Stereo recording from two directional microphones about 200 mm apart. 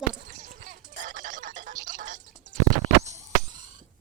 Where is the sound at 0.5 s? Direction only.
40° right (ahead or behind).